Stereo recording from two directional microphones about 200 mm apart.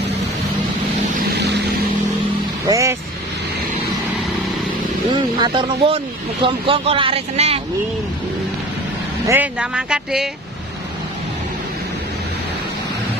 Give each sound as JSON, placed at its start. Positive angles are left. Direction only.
{"t": 2.7, "sound": "vehicle", "side_deg": -15}
{"t": 5.1, "sound": "a sound", "side_deg": -25}
{"t": 6.4, "sound": "speech", "side_deg": -25}
{"t": 9.3, "sound": "speech", "side_deg": -5}